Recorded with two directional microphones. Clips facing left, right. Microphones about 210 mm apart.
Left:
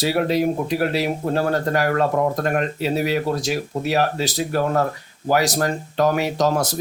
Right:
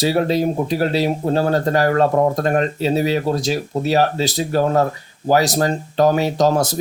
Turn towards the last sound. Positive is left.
turn(degrees=-25)  # may be behind; listen again after turning